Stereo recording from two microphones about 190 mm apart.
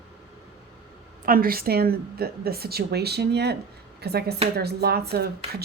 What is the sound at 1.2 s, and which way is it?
A woman's voice, 50° right (ahead or behind).